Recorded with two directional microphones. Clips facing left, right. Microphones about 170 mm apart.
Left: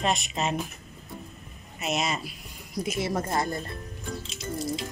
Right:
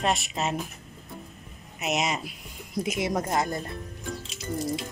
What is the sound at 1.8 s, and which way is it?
Speech, 20° right (ahead or behind).